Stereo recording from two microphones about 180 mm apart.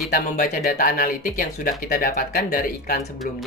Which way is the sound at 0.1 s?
50° left (ahead or behind).